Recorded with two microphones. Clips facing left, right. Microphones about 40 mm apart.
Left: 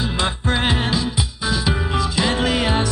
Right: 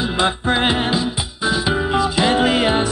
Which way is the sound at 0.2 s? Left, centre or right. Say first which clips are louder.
Right 4 dB; right.